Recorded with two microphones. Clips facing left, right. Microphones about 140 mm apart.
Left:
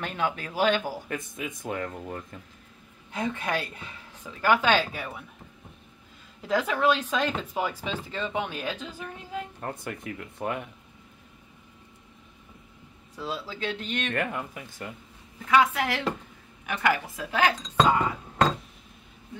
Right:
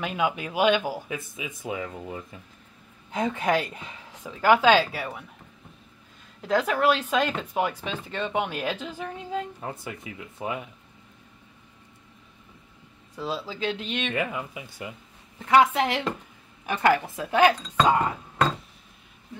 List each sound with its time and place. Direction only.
0.0 s speech: 10° right (ahead or behind)
6.4 s speech: centre (ahead or behind)
9.6 s speech: 5° right (ahead or behind)
13.2 s speech: centre (ahead or behind)
15.5 s speech: 25° right (ahead or behind)